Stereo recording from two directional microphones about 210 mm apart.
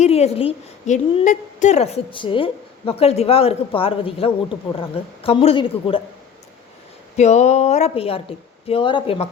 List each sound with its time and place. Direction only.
0.0 s a woman's voice: 30° left (ahead or behind)
7.2 s a woman's voice: 35° left (ahead or behind)